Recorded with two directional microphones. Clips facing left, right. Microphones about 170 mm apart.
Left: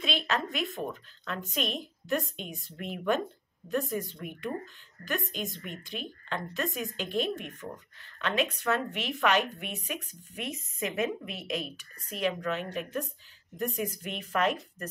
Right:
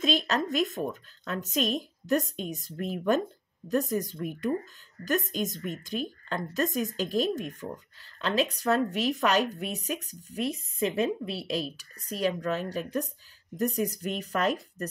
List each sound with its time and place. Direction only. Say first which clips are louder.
0.0 s speech: right 4 dB; 40° right (ahead or behind)